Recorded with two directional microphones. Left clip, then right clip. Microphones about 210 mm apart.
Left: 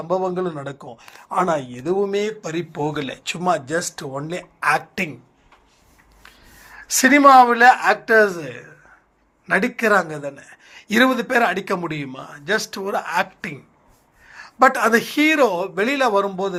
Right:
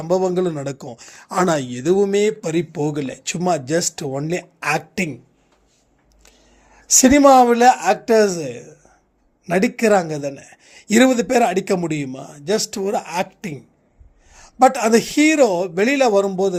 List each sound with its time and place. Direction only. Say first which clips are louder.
0.0 s a sound: right 3 dB; 50° right (ahead or behind)
2.9 s speech: right 1 dB; 60° right (ahead or behind)
6.7 s speech: right 1 dB; 55° right (ahead or behind)